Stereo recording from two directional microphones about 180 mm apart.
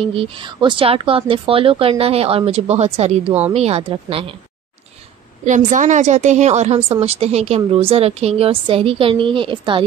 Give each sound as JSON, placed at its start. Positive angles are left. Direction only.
{"t": 0.0, "sound": "a woman's voice", "side_deg": -30}
{"t": 5.7, "sound": "a woman's voice", "side_deg": -45}